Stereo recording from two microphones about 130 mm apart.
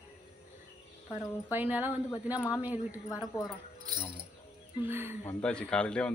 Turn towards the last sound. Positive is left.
turn(degrees=10)  # may be behind; listen again after turning